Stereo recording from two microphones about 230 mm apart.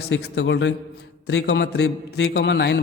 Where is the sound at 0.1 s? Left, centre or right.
Left.